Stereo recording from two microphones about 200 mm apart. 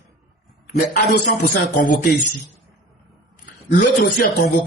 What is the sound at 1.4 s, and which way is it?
Speech, 40° left (ahead or behind).